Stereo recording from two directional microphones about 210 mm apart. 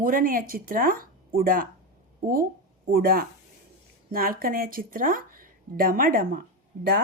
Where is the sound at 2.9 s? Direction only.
45° right (ahead or behind).